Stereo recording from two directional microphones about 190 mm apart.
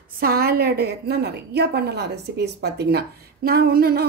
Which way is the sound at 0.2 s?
50° right (ahead or behind).